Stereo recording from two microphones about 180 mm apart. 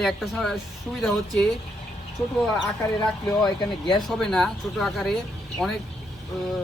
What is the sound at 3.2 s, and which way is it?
Speech, 25° left (ahead or behind).